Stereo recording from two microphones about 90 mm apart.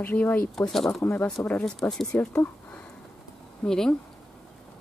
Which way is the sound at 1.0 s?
20° left (ahead or behind).